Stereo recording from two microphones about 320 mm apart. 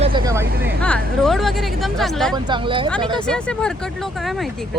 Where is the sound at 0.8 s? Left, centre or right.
Centre.